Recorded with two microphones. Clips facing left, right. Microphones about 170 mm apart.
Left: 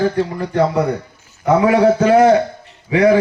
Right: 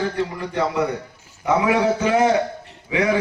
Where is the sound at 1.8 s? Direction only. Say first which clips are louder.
Left 7 dB; 50° left (ahead or behind).